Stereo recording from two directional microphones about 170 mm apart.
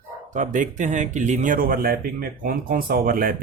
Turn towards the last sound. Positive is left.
turn(degrees=-60)  # may be behind; listen again after turning